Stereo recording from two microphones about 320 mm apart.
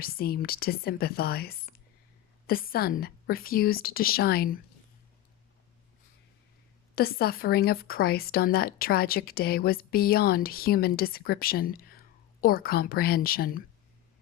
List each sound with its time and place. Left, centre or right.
0.0 s speech: left
6.9 s speech: left